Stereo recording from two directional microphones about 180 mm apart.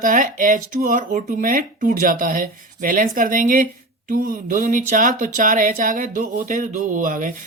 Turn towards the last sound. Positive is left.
turn(degrees=-50)  # may be behind; listen again after turning